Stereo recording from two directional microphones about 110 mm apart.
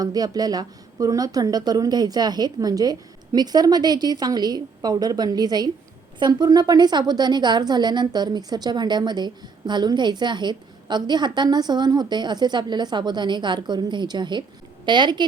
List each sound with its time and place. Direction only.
0.0 s a woman's voice: 35° right (ahead or behind)